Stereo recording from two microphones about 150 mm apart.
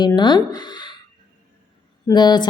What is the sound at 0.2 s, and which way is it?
Speech, 30° left (ahead or behind).